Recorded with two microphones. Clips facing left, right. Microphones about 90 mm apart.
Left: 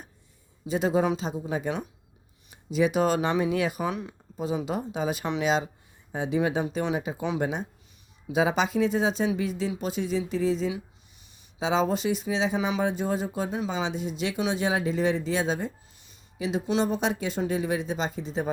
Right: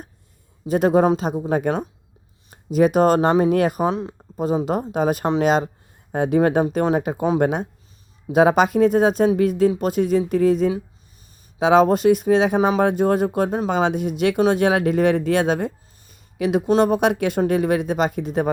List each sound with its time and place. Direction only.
0.7 s speech: 55° right (ahead or behind)
3.8 s speech: 35° right (ahead or behind)
4.4 s speech: 45° right (ahead or behind)